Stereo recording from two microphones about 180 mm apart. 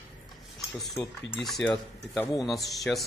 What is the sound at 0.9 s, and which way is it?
Speech, 10° left (ahead or behind).